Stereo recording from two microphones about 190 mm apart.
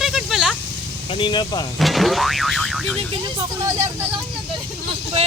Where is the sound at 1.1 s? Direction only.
25° left (ahead or behind).